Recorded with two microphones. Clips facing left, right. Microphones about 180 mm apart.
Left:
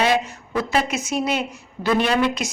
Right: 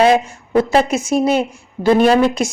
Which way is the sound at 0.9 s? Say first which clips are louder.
Right 8 dB; 30° right (ahead or behind).